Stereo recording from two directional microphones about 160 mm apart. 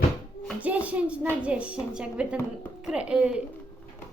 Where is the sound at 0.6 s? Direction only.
10° right (ahead or behind).